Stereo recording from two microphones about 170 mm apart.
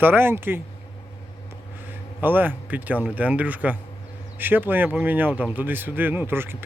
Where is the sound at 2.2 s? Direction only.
10° right (ahead or behind).